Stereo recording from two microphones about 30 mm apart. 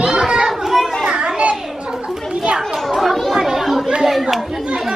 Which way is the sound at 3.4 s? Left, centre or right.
Centre.